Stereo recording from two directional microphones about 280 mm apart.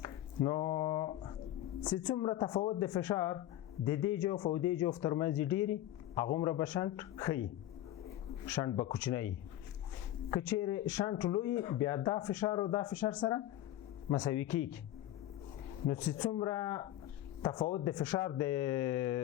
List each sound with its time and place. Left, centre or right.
0.0 s a sound: centre
1.9 s speech: centre
8.4 s speech: centre
10.3 s speech: centre
15.9 s speech: centre